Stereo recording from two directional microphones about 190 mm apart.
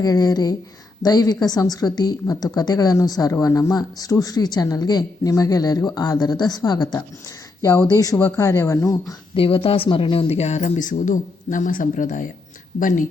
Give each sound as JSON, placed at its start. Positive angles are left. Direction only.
{"t": 0.0, "sound": "speech", "side_deg": 20}
{"t": 9.3, "sound": "speech", "side_deg": 30}